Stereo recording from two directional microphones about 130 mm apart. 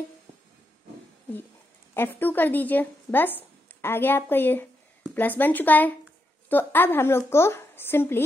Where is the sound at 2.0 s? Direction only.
15° left (ahead or behind).